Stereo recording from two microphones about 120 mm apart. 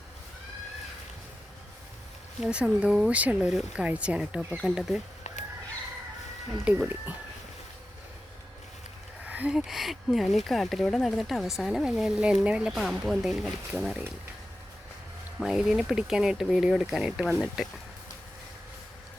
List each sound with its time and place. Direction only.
2.4 s speech: 10° right (ahead or behind)
6.7 s speech: 15° right (ahead or behind)
9.2 s a sound: 15° right (ahead or behind)
9.6 s speech: centre (ahead or behind)
15.4 s speech: 5° right (ahead or behind)